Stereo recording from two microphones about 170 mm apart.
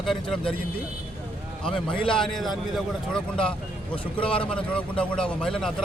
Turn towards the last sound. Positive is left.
turn(degrees=5)  # may be behind; listen again after turning